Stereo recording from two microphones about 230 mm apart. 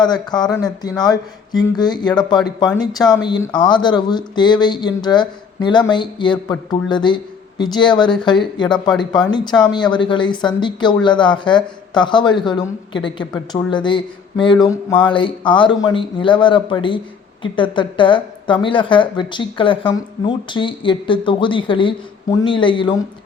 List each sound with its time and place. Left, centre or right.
0.0 s speech: centre